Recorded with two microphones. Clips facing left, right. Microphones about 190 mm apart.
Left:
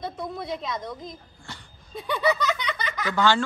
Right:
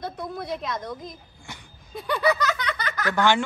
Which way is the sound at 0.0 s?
Centre (ahead or behind).